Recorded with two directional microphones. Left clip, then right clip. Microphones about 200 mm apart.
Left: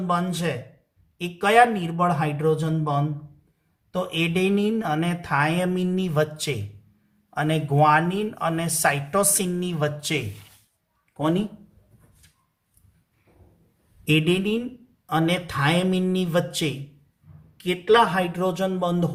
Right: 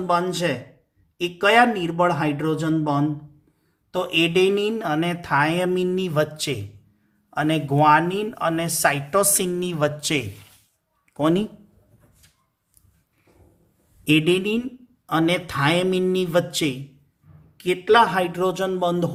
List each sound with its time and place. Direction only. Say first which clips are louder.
0.1 s speech: right 4 dB; 40° right (ahead or behind)
14.0 s speech: right 3 dB; 45° right (ahead or behind)